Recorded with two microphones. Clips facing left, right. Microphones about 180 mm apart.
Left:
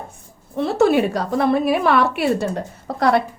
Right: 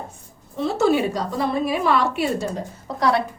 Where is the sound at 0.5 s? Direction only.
60° left (ahead or behind).